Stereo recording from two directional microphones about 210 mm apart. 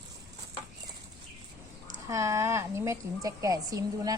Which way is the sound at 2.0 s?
15° right (ahead or behind).